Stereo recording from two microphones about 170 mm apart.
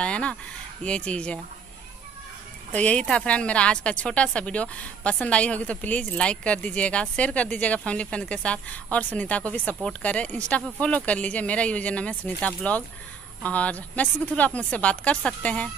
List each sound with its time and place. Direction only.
0.0 s a woman's voice: 5° left (ahead or behind)
2.7 s a woman's voice: 5° left (ahead or behind)